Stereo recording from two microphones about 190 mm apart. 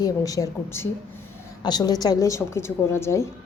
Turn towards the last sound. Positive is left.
turn(degrees=15)  # may be behind; listen again after turning